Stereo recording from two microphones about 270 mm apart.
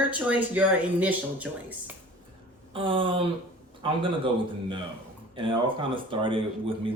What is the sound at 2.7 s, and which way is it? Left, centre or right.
Speech, centre.